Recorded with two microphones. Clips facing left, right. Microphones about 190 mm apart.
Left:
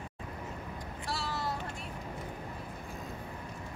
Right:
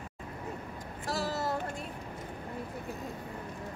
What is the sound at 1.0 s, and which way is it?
Speech, 45° right (ahead or behind).